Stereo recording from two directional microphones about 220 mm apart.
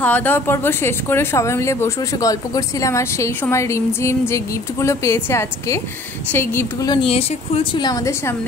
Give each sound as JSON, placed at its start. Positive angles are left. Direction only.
{"t": 0.0, "sound": "speech", "side_deg": 10}